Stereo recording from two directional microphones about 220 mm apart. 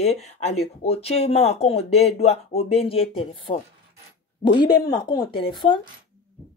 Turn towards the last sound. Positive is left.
turn(degrees=20)  # may be behind; listen again after turning